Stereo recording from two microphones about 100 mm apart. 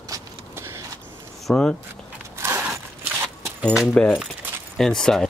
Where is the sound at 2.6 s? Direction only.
15° right (ahead or behind).